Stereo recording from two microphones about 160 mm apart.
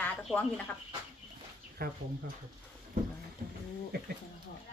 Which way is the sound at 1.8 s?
70° right (ahead or behind).